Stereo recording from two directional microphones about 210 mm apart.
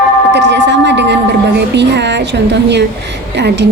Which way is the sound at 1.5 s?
55° right (ahead or behind).